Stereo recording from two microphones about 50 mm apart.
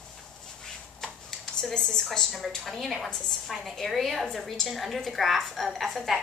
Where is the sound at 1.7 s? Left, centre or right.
Centre.